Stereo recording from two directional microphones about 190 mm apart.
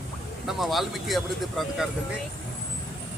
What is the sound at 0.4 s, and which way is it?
Speech, centre (ahead or behind).